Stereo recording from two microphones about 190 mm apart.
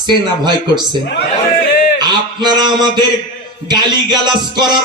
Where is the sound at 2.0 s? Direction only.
20° right (ahead or behind).